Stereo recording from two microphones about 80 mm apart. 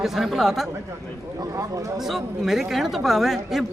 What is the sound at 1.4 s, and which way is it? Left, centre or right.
Speech, right.